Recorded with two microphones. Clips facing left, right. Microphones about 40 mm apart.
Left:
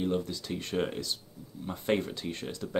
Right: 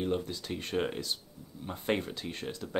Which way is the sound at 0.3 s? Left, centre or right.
Centre.